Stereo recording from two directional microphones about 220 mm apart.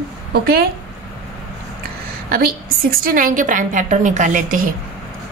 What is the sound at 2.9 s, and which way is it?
Speech, 40° right (ahead or behind).